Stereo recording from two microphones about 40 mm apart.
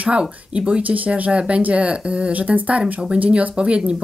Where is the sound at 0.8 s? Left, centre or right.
Right.